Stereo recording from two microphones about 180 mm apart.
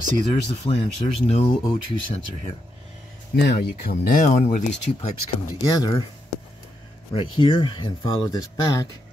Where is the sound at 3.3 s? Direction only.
65° left (ahead or behind); by 5.1 s 35° left (ahead or behind).